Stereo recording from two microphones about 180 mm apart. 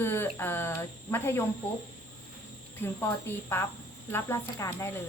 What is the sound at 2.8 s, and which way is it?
Speech, 15° left (ahead or behind).